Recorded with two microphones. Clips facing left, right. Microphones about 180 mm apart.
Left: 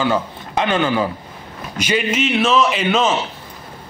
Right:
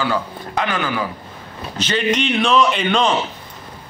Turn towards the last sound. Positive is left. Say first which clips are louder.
# even
turn(degrees=5)  # may be behind; listen again after turning